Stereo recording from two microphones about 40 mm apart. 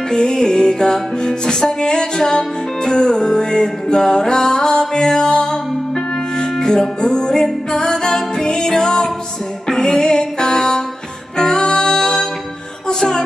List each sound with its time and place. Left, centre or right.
0.1 s music: centre